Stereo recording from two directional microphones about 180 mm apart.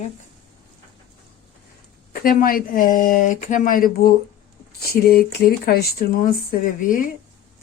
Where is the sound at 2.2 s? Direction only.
50° left (ahead or behind).